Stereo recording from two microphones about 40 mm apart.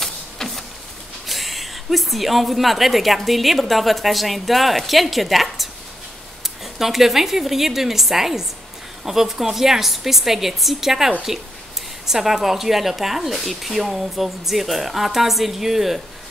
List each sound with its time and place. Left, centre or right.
0.0 s printer: centre
1.2 s a woman's voice: centre